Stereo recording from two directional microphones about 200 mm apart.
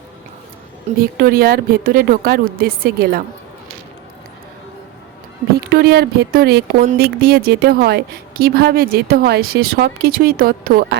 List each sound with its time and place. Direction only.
0.9 s a woman's voice: 45° right (ahead or behind)
5.6 s a woman's voice: 55° right (ahead or behind)